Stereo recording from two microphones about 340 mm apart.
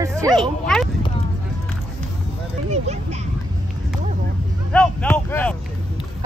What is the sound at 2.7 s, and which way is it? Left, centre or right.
Speech, centre.